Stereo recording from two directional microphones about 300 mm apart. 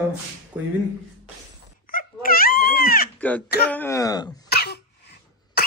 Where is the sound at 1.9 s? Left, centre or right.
Left.